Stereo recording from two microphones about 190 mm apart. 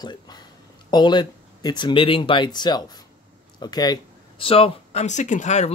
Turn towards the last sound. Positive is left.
turn(degrees=40)  # may be behind; listen again after turning